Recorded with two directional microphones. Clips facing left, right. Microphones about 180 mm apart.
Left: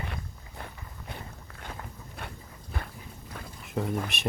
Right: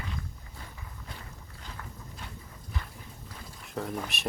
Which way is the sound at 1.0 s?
60° left (ahead or behind).